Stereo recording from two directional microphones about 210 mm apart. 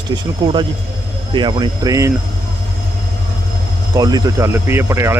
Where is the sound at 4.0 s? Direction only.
15° right (ahead or behind).